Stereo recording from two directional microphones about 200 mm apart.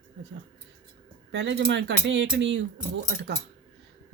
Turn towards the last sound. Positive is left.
turn(degrees=-60)  # may be behind; listen again after turning